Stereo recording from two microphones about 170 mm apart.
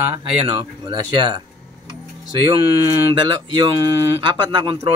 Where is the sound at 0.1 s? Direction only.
25° right (ahead or behind).